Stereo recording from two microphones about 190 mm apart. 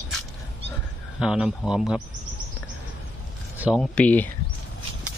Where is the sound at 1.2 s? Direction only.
5° right (ahead or behind).